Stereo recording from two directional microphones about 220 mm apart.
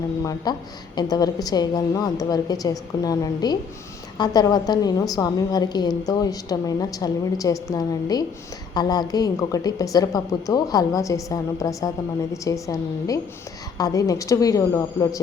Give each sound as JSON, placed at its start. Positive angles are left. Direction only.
{"t": 0.2, "sound": "a woman's voice", "side_deg": 15}